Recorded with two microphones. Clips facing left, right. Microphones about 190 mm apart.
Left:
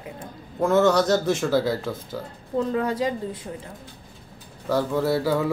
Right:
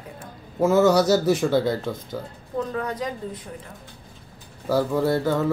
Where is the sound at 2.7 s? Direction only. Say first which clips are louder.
Left 4 dB; 25° left (ahead or behind).